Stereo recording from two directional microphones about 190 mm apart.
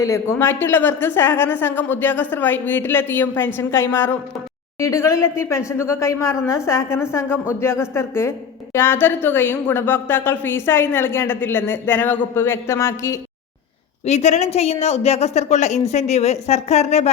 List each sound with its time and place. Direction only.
0.0 s speech: 15° left (ahead or behind)
14.0 s a woman's voice: 35° left (ahead or behind)